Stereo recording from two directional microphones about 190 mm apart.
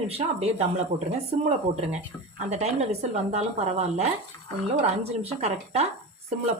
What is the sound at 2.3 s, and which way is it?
Speech, 35° right (ahead or behind).